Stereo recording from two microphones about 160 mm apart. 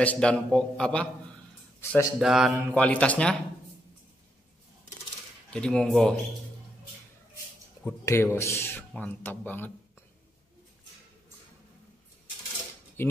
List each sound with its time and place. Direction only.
0.0 s speech: 10° left (ahead or behind)
1.8 s speech: 15° left (ahead or behind)
2.1 s speech: 5° right (ahead or behind)
2.5 s speech: 10° left (ahead or behind)
5.5 s speech: 5° left (ahead or behind)
7.8 s speech: 15° left (ahead or behind)
13.0 s speech: 15° left (ahead or behind)